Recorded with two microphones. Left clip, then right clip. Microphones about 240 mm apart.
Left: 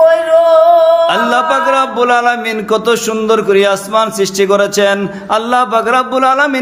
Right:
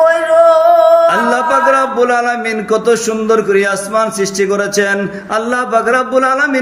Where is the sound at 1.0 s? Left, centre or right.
Centre.